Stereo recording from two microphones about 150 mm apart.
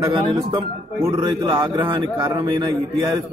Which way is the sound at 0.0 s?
30° right (ahead or behind).